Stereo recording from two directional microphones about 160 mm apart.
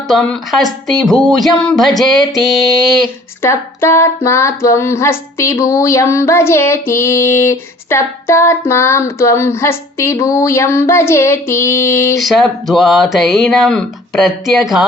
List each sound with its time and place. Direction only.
0.1 s speech: centre (ahead or behind)
3.4 s a sound: 15° left (ahead or behind)
12.2 s speech: centre (ahead or behind)